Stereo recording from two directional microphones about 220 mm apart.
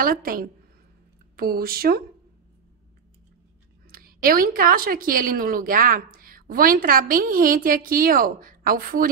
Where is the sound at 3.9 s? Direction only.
40° right (ahead or behind).